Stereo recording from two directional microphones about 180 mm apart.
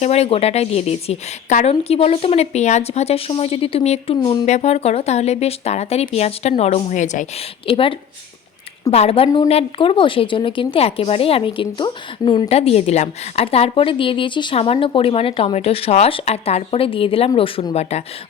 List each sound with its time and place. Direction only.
0.0 s a woman's voice: 35° left (ahead or behind)
7.7 s a woman's voice: 30° left (ahead or behind)